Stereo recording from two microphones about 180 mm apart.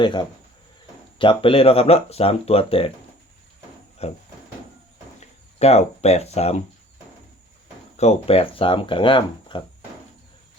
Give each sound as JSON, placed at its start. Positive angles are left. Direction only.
{"t": 0.0, "sound": "speech", "side_deg": 25}
{"t": 4.0, "sound": "speech", "side_deg": 35}
{"t": 5.2, "sound": "speech", "side_deg": 35}
{"t": 7.9, "sound": "speech", "side_deg": 35}